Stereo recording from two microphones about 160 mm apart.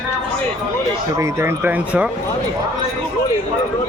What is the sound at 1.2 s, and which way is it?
Speech, 15° right (ahead or behind).